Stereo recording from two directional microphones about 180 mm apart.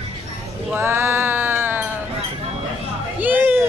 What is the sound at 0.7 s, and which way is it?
Sheep, 10° right (ahead or behind).